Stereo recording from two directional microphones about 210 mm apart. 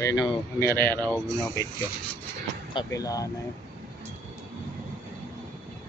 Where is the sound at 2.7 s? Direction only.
20° left (ahead or behind).